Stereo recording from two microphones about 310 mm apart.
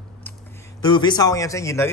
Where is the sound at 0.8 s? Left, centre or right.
Centre.